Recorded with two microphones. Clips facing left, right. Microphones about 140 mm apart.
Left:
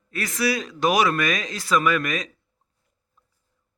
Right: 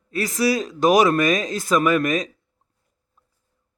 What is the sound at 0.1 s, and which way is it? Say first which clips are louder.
Speech: right 4 dB; 40° right (ahead or behind).